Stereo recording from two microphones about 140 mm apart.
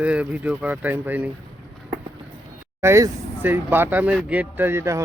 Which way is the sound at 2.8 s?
20° right (ahead or behind).